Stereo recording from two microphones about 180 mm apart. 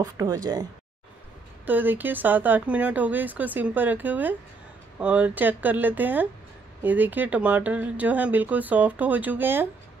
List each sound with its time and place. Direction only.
0.0 s speech: 20° right (ahead or behind)
1.7 s speech: 10° right (ahead or behind)